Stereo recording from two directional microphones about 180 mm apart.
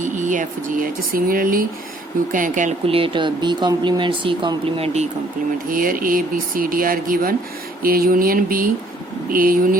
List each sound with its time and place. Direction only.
0.0 s speech: 45° right (ahead or behind)
5.6 s speech: 50° right (ahead or behind)